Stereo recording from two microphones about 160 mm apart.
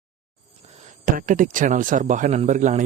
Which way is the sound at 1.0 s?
55° right (ahead or behind).